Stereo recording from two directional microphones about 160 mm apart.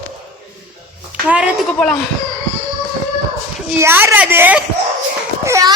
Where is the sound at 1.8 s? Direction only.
5° left (ahead or behind).